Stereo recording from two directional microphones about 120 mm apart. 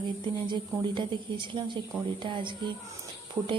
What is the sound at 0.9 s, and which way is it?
A woman's voice, 40° right (ahead or behind).